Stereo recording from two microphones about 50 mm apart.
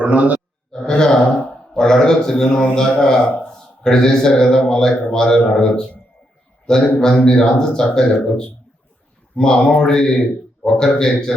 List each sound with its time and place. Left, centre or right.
0.0 s a man's voice: right
0.7 s a sound: centre
1.7 s a man's voice: centre